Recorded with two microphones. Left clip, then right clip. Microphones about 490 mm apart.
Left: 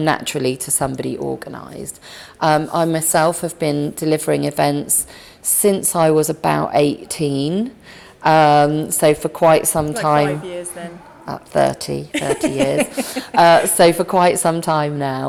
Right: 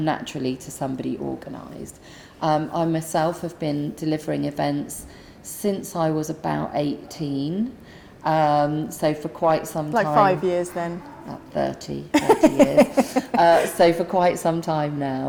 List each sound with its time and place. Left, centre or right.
0.0 s a woman's voice: left
10.4 s speech: right
11.3 s a woman's voice: left
12.1 s speech: right
13.3 s a woman's voice: left